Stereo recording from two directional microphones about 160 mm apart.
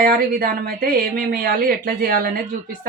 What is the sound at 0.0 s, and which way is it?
Speech, 65° right (ahead or behind).